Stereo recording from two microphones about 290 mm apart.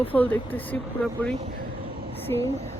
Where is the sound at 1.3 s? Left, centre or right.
Right.